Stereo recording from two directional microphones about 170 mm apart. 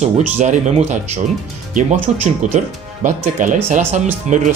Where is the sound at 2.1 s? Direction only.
40° right (ahead or behind).